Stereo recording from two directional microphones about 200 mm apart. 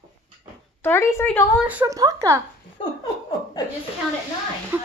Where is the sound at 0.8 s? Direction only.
10° left (ahead or behind).